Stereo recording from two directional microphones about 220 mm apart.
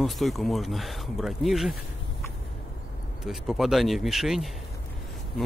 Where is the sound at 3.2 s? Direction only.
Centre (ahead or behind).